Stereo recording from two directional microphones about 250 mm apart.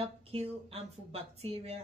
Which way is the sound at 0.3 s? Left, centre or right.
Right.